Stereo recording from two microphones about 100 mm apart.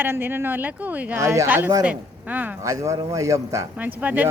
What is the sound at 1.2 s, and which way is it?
Speech, 30° right (ahead or behind).